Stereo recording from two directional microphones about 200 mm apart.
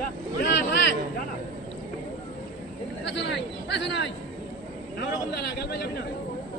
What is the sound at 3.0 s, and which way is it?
A man's voice, 60° left (ahead or behind).